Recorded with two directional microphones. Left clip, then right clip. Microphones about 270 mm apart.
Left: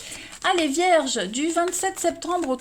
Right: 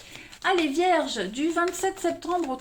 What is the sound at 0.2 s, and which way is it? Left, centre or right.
A woman's voice, left.